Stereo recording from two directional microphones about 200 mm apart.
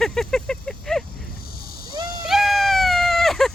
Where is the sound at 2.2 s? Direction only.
Centre (ahead or behind).